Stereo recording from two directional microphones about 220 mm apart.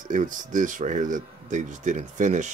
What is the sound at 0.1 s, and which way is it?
Speech, 35° right (ahead or behind).